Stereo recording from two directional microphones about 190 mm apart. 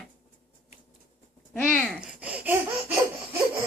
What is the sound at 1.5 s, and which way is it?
Laughter, 5° left (ahead or behind).